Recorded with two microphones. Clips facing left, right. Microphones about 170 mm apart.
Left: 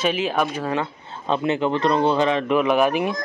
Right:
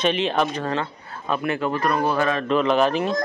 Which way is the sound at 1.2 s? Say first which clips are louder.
Left 3 dB; 25° left (ahead or behind).